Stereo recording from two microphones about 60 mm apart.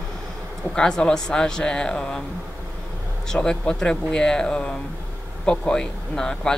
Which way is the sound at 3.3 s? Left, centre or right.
Centre.